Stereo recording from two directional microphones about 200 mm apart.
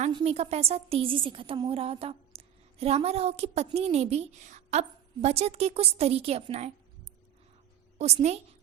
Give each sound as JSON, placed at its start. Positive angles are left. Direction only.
{"t": 0.1, "sound": "a woman's voice", "side_deg": -25}
{"t": 7.9, "sound": "a woman's voice", "side_deg": -35}